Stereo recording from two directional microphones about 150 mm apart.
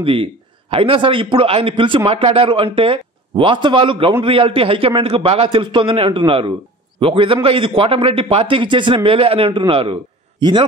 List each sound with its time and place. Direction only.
0.0 s a man's voice: 35° right (ahead or behind)